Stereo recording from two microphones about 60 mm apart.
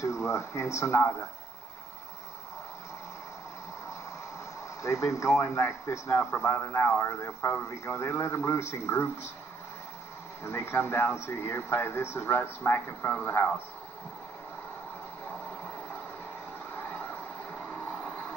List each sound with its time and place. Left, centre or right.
0.0 s speech: left
4.8 s speech: left
10.4 s speech: left
16.7 s vehicle: left